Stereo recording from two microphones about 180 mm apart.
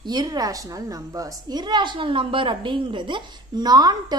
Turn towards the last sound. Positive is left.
turn(degrees=-20)  # may be behind; listen again after turning